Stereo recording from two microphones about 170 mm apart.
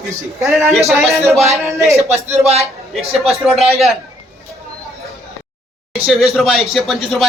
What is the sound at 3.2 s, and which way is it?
Speech, centre (ahead or behind).